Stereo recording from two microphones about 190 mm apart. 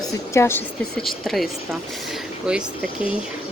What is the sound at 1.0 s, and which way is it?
Speech, centre (ahead or behind).